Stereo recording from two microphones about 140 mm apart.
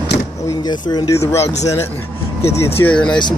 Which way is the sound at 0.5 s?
30° left (ahead or behind).